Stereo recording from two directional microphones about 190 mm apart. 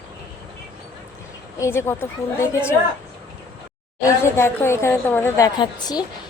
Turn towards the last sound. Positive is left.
turn(degrees=20)  # may be behind; listen again after turning